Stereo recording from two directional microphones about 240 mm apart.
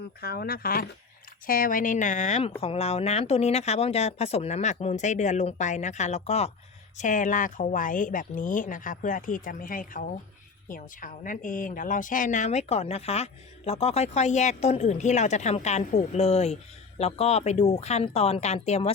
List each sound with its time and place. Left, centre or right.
0.2 s a woman's voice: left